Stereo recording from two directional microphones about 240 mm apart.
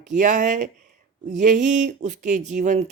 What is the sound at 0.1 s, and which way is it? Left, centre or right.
Speech, right.